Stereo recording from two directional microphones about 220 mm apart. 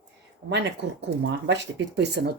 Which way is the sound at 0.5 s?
50° right (ahead or behind).